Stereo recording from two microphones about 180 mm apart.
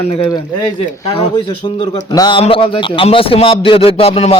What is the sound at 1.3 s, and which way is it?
A man's voice, 25° left (ahead or behind).